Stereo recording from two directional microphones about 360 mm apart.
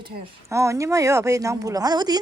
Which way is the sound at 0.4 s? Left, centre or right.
Centre.